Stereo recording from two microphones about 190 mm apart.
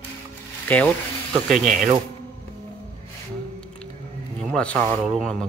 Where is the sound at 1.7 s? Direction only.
45° right (ahead or behind).